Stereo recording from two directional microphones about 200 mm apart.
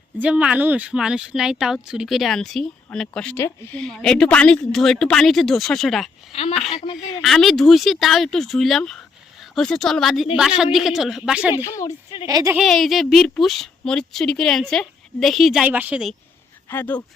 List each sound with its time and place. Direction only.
0.2 s speech: 5° right (ahead or behind)
6.3 s speech: 30° left (ahead or behind)
6.9 s speech: centre (ahead or behind)
11.5 s a woman's voice: 15° left (ahead or behind)
12.3 s speech: 20° right (ahead or behind)
12.5 s speech: centre (ahead or behind)
16.6 s a woman's voice: 10° left (ahead or behind)